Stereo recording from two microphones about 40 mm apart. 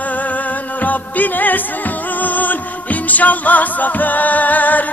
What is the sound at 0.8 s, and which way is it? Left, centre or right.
Music, left.